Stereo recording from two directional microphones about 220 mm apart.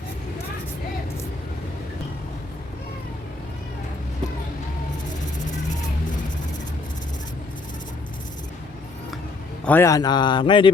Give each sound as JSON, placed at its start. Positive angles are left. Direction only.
{"t": 9.6, "sound": "speech", "side_deg": 10}